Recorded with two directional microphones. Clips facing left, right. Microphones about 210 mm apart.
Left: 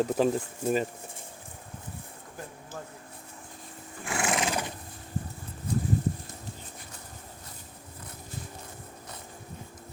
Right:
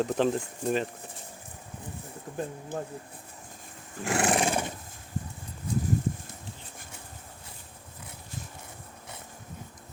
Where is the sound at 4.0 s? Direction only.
40° right (ahead or behind).